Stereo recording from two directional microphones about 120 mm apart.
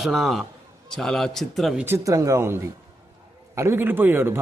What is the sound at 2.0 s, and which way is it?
A man's voice, 25° right (ahead or behind).